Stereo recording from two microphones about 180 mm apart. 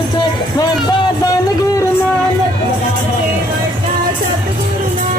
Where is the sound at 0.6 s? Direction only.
20° left (ahead or behind).